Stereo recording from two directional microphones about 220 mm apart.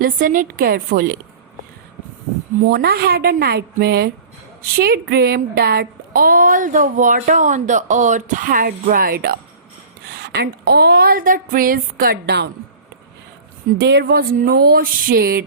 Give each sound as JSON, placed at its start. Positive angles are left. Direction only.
{"t": 0.0, "sound": "speech", "side_deg": -40}
{"t": 2.6, "sound": "speech", "side_deg": -45}
{"t": 13.7, "sound": "speech", "side_deg": -45}